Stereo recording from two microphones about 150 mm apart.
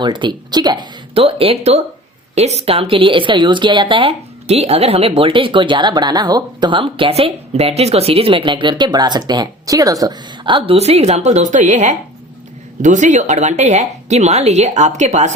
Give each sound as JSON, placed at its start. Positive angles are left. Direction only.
{"t": 0.0, "sound": "speech", "side_deg": -30}
{"t": 1.2, "sound": "a woman's voice", "side_deg": -40}
{"t": 10.8, "sound": "a woman's voice", "side_deg": -45}